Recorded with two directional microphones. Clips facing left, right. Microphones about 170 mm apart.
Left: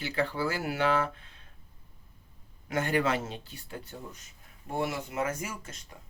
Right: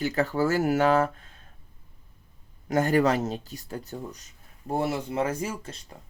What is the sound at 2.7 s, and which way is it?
Speech, 40° right (ahead or behind).